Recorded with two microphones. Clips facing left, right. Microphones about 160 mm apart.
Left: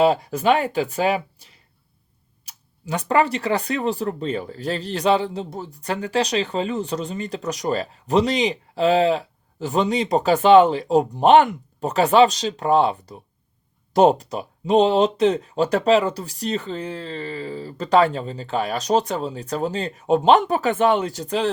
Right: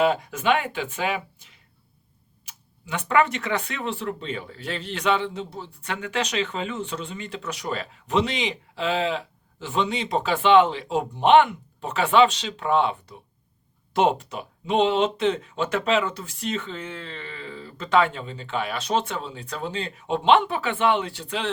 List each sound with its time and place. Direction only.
0.0 s speech: 35° left (ahead or behind)